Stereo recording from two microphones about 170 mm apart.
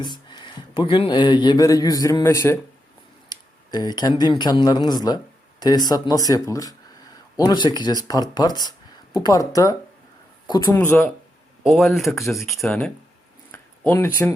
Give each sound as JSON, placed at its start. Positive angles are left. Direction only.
{"t": 0.0, "sound": "speech", "side_deg": 25}
{"t": 10.8, "sound": "speech", "side_deg": 10}
{"t": 11.6, "sound": "speech", "side_deg": 0}
{"t": 13.5, "sound": "a sound", "side_deg": 10}